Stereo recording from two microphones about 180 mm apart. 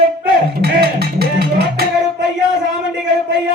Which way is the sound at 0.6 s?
60° right (ahead or behind).